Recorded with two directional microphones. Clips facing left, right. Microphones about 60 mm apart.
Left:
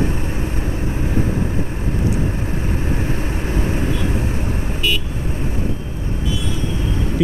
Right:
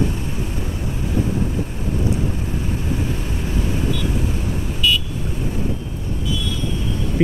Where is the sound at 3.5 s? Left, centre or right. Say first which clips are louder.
Left 1 dB; left.